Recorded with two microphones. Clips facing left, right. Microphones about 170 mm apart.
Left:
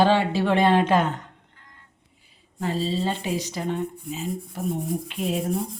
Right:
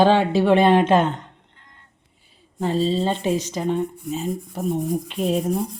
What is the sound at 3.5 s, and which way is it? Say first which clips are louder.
Speech: right 5 dB; 20° right (ahead or behind).